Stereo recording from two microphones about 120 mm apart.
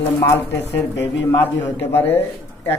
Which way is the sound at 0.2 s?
20° left (ahead or behind).